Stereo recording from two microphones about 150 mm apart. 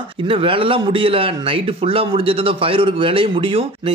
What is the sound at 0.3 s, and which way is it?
A man's voice, 35° right (ahead or behind).